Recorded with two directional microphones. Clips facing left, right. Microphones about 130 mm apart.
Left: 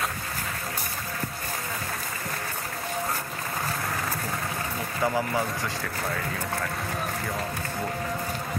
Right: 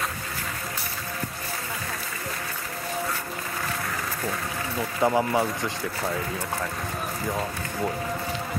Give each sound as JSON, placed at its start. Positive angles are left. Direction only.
{"t": 5.0, "sound": "speech", "side_deg": -20}